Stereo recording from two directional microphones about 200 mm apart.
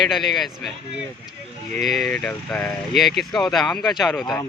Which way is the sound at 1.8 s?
Centre (ahead or behind).